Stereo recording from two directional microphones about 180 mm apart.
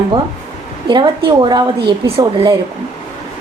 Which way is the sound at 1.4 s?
25° right (ahead or behind).